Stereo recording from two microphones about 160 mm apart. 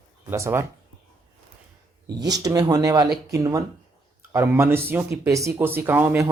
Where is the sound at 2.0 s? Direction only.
25° right (ahead or behind).